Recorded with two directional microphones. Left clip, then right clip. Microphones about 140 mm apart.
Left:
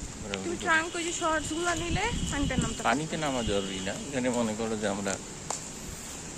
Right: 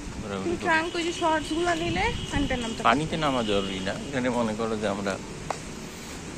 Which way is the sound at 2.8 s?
40° left (ahead or behind).